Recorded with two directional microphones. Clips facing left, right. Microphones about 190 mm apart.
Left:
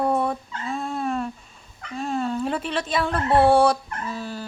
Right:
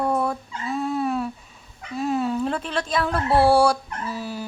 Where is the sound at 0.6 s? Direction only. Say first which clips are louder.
Right 3 dB; 5° right (ahead or behind).